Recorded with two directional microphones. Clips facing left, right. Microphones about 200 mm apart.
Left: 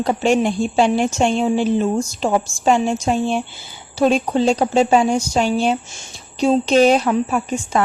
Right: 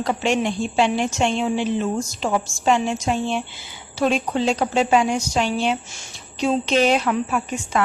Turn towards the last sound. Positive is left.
turn(degrees=35)  # may be behind; listen again after turning